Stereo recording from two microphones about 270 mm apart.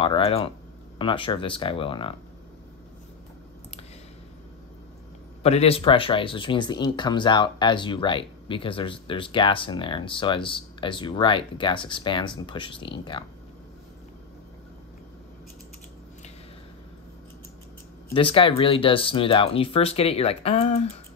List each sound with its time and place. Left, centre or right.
0.0 s speech: left
5.4 s speech: left
18.1 s speech: centre